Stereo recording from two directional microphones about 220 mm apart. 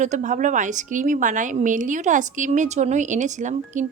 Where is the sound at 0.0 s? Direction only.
35° right (ahead or behind).